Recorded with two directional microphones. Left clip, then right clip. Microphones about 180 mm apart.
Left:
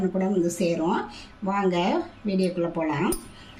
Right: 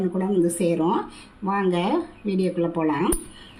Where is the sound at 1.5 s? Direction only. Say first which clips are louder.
Right 1 dB; 30° right (ahead or behind).